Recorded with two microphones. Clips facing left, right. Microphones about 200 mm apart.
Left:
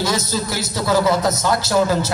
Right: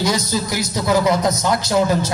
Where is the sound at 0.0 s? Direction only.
15° right (ahead or behind).